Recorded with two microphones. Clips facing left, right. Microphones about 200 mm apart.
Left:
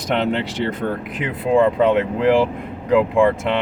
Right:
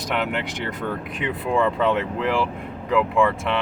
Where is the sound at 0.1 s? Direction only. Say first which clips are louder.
Left 6 dB; 25° left (ahead or behind).